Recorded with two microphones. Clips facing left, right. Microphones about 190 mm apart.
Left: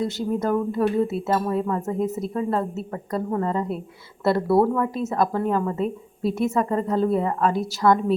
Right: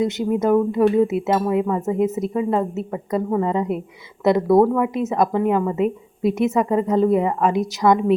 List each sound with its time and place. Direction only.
0.0 s a woman's voice: 20° right (ahead or behind)